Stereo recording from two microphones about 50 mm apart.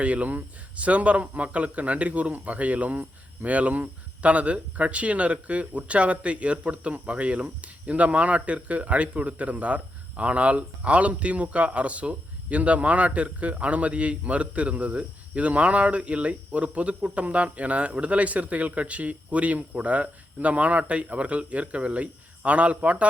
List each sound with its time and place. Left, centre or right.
0.0 s speech: right